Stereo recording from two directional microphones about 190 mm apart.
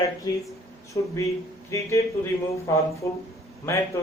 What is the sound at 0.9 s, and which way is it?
Speech, 15° left (ahead or behind).